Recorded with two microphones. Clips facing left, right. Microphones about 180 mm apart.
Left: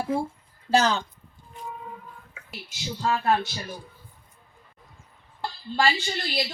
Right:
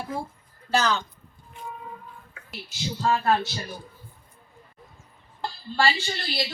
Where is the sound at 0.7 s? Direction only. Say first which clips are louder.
Left 2 dB; 30° left (ahead or behind).